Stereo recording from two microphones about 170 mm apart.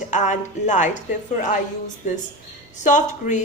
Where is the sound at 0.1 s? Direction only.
45° left (ahead or behind).